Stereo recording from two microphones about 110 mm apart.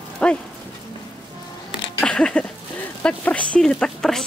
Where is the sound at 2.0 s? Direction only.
10° left (ahead or behind).